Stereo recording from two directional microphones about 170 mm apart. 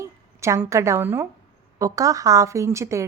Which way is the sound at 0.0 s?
15° right (ahead or behind).